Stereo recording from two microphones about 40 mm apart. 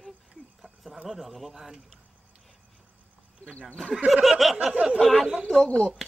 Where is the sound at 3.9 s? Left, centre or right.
Centre.